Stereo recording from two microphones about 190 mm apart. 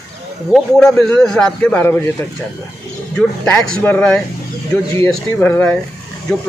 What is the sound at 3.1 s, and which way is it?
Speech, 5° left (ahead or behind).